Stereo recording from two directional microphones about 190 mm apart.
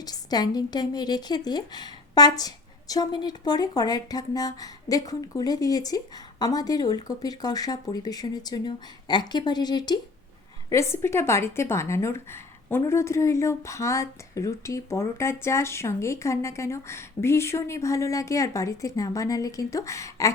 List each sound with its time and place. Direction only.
0.0 s speech: 20° left (ahead or behind)